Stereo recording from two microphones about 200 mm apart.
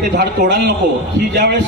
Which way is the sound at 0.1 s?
55° right (ahead or behind).